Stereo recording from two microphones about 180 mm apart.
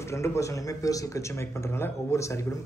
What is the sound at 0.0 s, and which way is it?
Speech, 15° left (ahead or behind).